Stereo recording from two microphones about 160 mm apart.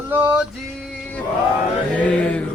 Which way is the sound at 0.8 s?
5° left (ahead or behind).